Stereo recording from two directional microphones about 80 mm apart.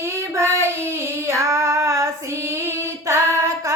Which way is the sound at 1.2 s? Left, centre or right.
Right.